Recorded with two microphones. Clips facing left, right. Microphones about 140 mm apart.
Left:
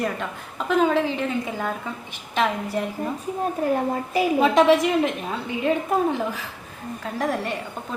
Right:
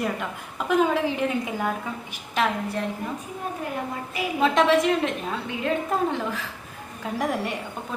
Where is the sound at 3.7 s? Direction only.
35° left (ahead or behind).